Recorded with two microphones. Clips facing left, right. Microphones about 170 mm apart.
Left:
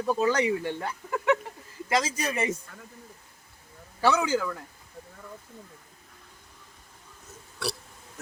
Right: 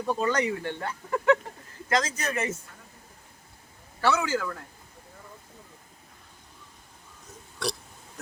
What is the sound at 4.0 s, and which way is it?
Speech, 15° left (ahead or behind).